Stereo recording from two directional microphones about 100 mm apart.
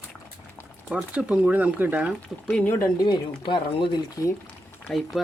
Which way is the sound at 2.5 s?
15° left (ahead or behind).